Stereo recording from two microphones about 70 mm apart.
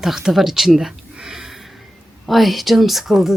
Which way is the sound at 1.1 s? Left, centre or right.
Centre.